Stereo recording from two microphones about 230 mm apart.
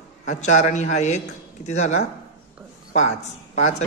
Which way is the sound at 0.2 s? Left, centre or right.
Left.